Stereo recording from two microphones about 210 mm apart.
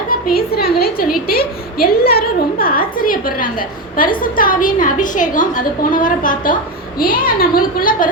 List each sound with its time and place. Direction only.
0.1 s a woman's voice: 45° left (ahead or behind)